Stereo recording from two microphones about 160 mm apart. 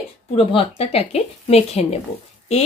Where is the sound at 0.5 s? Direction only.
35° left (ahead or behind).